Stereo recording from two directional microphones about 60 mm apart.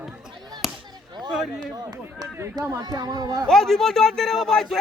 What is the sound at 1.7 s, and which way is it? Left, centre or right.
Speech, right.